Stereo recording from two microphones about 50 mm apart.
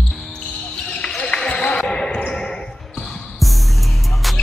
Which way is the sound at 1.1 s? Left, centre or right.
Centre.